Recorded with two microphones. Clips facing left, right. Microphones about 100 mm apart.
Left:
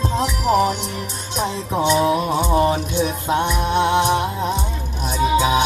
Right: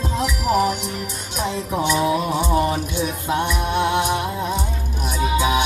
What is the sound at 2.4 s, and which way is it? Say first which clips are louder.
Music: left 2 dB; 25° left (ahead or behind).